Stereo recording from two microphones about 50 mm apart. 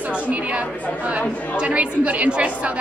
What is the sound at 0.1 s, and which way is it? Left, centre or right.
Chatter, right.